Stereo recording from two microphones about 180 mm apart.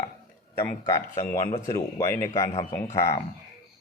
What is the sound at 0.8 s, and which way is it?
Speech, 20° left (ahead or behind).